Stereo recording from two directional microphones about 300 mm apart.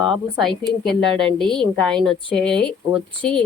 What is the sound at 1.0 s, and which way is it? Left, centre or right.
Speech, centre.